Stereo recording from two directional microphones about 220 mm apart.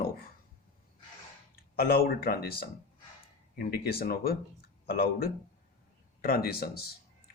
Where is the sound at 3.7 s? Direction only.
45° left (ahead or behind).